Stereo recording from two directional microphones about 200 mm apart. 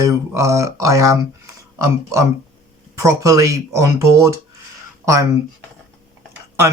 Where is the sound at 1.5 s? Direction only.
15° right (ahead or behind).